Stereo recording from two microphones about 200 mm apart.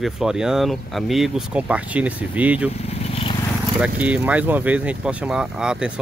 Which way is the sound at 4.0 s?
5° right (ahead or behind).